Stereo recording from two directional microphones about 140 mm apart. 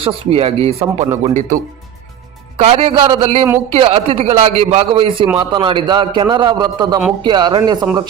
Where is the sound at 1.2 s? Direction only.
60° right (ahead or behind).